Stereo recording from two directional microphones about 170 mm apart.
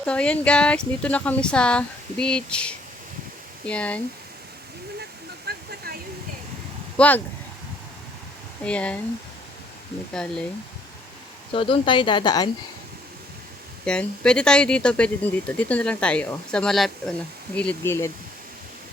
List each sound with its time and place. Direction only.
0.0 s speech: 5° left (ahead or behind)
5.5 s a sound: 65° right (ahead or behind)
6.9 s speech: 10° left (ahead or behind)
8.6 s speech: 5° left (ahead or behind)
11.5 s speech: 30° left (ahead or behind)
13.8 s speech: 5° left (ahead or behind)